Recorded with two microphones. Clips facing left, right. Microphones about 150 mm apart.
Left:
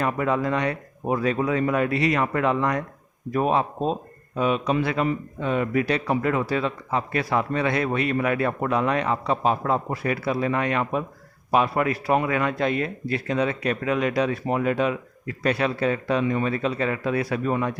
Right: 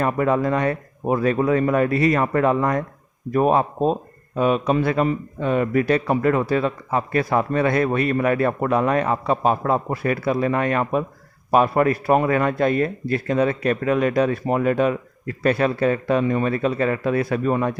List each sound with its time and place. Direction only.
0.0 s speech: 45° right (ahead or behind)